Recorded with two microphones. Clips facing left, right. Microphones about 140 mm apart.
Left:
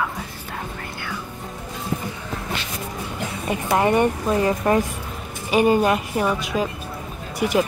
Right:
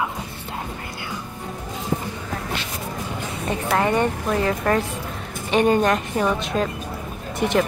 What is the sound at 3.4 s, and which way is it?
Speech, 15° left (ahead or behind).